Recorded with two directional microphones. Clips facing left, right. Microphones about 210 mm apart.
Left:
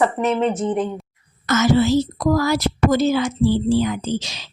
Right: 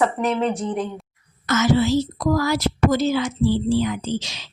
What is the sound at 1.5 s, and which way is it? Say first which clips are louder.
Speech: left 2 dB; 45° left (ahead or behind).